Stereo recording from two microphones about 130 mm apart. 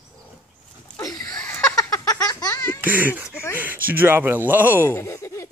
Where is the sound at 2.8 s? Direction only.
15° right (ahead or behind).